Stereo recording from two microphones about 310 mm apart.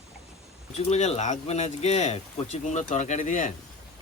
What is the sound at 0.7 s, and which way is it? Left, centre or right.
Speech, left.